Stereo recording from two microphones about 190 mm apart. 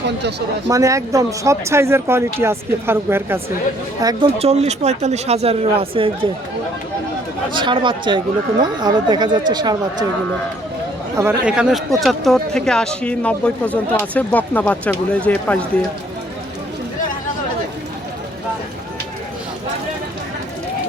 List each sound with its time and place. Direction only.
0.2 s speech: 60° right (ahead or behind)
0.7 s speech: 15° right (ahead or behind)
4.0 s speech: 30° right (ahead or behind)
7.5 s speech: 25° right (ahead or behind)
11.2 s speech: 10° right (ahead or behind); by 15.6 s 10° left (ahead or behind)